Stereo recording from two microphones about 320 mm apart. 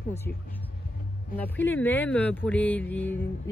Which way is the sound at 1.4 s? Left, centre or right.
Centre.